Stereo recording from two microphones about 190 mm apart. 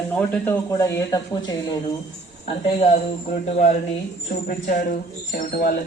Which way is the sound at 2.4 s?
35° left (ahead or behind).